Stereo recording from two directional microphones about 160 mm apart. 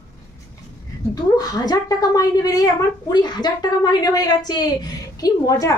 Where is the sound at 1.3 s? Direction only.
25° left (ahead or behind).